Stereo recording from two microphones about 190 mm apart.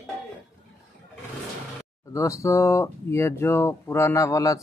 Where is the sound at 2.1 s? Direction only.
15° left (ahead or behind).